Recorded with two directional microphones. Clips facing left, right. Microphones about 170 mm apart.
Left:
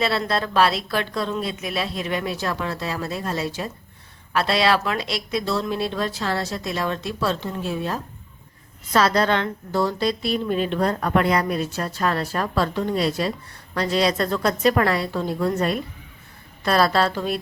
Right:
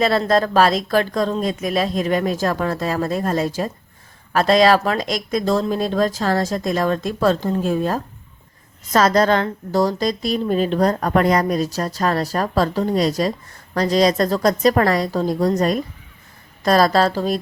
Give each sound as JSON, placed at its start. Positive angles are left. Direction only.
{"t": 0.0, "sound": "a woman's voice", "side_deg": -45}